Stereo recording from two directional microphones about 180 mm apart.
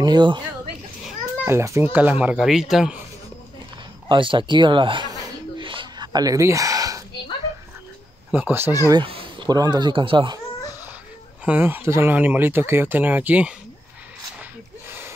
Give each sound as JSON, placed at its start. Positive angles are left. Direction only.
{"t": 0.0, "sound": "speech", "side_deg": -25}
{"t": 1.0, "sound": "a child's voice", "side_deg": -10}
{"t": 4.1, "sound": "a sound", "side_deg": -25}
{"t": 8.3, "sound": "speech", "side_deg": -10}
{"t": 8.8, "sound": "speech", "side_deg": -25}
{"t": 11.4, "sound": "speech", "side_deg": -10}
{"t": 14.9, "sound": "gasp", "side_deg": -10}